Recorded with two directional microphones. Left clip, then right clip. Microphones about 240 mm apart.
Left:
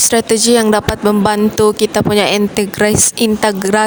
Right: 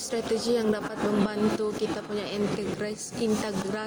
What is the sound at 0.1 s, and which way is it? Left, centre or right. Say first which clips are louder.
Speech: left 12 dB; left.